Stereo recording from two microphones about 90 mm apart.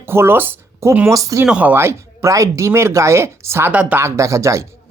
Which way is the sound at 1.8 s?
30° right (ahead or behind).